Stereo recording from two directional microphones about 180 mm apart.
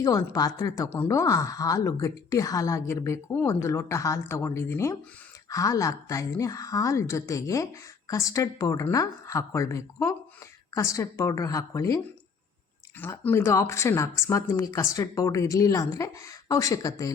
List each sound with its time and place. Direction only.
0.0 s a woman's voice: 20° left (ahead or behind)